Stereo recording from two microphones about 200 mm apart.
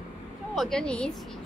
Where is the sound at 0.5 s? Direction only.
Centre (ahead or behind).